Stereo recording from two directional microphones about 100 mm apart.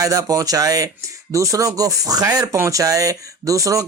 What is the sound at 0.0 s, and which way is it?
Speech, 35° right (ahead or behind).